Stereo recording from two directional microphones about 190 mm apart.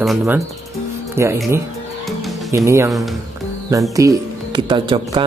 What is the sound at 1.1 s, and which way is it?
Speech, 15° right (ahead or behind).